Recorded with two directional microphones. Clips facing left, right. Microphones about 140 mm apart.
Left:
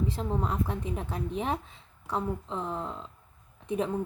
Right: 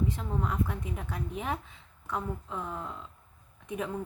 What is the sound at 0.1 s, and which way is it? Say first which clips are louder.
A woman's voice: left 2 dB; 30° left (ahead or behind).